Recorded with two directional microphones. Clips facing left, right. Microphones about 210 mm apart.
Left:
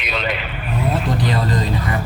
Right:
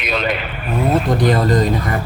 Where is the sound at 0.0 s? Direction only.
45° right (ahead or behind).